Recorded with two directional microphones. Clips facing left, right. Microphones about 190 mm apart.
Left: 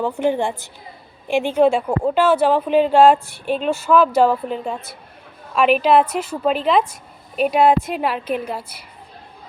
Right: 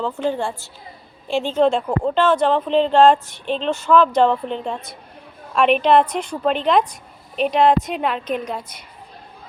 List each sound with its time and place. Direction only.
0.0 s a woman's voice: 15° left (ahead or behind)